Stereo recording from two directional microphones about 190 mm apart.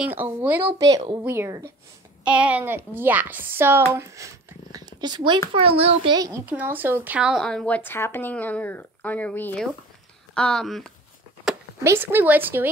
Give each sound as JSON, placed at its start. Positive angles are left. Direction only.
{"t": 0.0, "sound": "a child's voice", "side_deg": -10}
{"t": 6.1, "sound": "speech", "side_deg": -15}
{"t": 11.8, "sound": "speech", "side_deg": -10}